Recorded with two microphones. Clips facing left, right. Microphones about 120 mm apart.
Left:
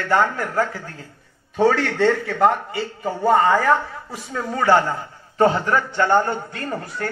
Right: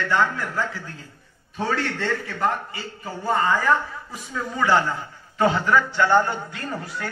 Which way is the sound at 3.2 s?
65° left (ahead or behind).